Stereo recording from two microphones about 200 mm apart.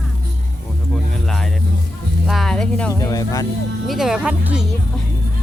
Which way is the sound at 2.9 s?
20° left (ahead or behind).